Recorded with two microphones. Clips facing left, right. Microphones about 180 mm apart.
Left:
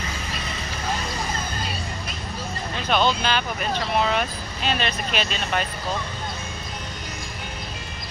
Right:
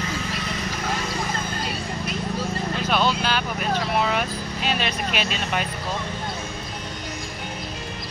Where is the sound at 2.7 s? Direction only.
5° right (ahead or behind).